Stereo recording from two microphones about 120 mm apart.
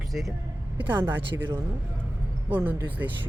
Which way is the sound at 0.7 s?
15° right (ahead or behind).